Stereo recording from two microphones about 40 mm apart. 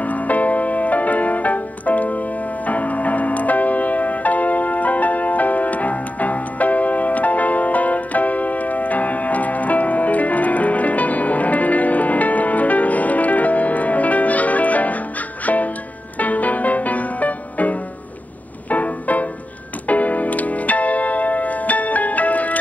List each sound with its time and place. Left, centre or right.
0.0 s music: left